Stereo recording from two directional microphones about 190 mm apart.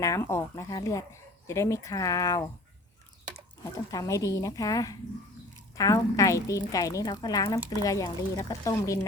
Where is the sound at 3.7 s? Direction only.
20° left (ahead or behind).